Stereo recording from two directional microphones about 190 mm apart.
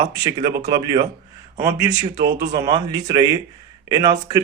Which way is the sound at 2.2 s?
50° right (ahead or behind).